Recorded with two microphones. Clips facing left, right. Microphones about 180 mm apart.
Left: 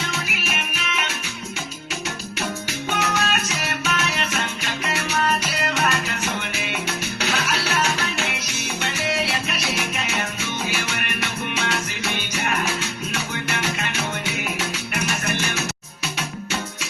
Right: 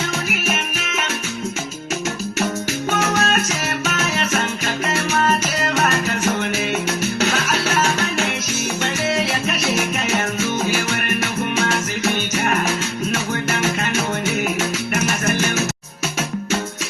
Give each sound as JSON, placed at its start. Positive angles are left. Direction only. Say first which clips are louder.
{"t": 0.4, "sound": "music", "louder": "right 5 dB", "side_deg": -45}
{"t": 3.0, "sound": "music", "louder": "right 4 dB", "side_deg": -45}
{"t": 7.2, "sound": "music", "louder": "right 2 dB", "side_deg": -45}